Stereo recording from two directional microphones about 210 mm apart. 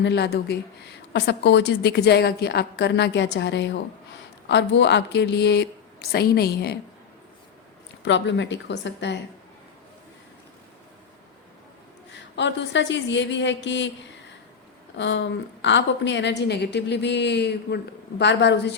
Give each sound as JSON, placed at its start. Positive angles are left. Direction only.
{"t": 0.0, "sound": "a woman's voice", "side_deg": 55}
{"t": 8.0, "sound": "a woman's voice", "side_deg": 60}
{"t": 12.1, "sound": "a woman's voice", "side_deg": 60}